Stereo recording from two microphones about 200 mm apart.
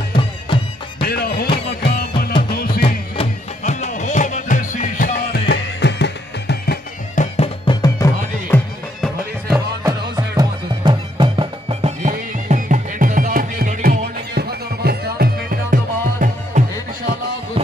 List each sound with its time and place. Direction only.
0.1 s music: 25° left (ahead or behind)
1.0 s music: 50° left (ahead or behind)
2.8 s music: 30° left (ahead or behind); by 6.8 s 55° left (ahead or behind)
7.2 s music: 30° left (ahead or behind)
7.8 s music: 15° left (ahead or behind)
9.8 s music: 20° right (ahead or behind); by 16.6 s 45° right (ahead or behind)